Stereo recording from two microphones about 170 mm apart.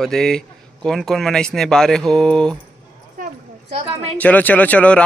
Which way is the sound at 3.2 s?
55° right (ahead or behind).